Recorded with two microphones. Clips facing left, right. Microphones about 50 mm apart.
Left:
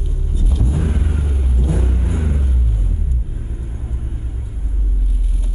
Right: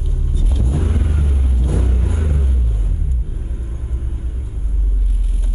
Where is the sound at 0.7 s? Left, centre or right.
Centre.